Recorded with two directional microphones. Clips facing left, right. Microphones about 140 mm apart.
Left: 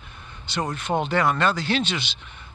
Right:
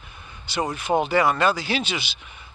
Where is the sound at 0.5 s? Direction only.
5° right (ahead or behind).